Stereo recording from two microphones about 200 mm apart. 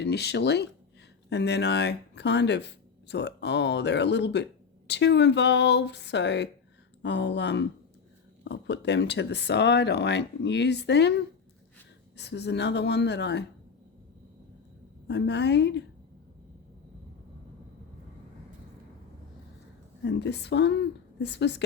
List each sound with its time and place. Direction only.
0.0 s speech: 55° left (ahead or behind)
15.0 s speech: 60° left (ahead or behind)
20.1 s speech: 55° left (ahead or behind)